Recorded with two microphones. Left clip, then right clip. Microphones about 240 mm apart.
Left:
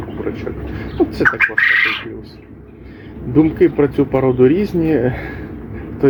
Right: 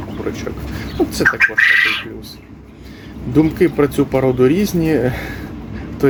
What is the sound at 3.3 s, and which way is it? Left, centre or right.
Speech, centre.